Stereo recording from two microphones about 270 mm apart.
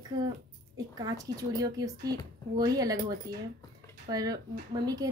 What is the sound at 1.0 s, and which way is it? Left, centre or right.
Speech, centre.